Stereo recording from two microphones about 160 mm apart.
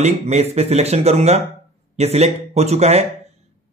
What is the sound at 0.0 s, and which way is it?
A man's voice, 40° right (ahead or behind).